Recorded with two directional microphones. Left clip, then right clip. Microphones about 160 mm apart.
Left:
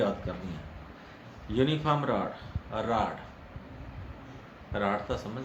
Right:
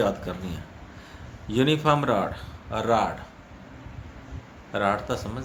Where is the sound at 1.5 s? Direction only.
55° right (ahead or behind).